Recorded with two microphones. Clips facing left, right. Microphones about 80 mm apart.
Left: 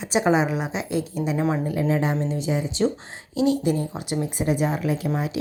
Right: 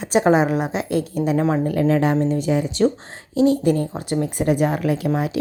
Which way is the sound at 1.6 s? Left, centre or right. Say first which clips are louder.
Right 5 dB; right.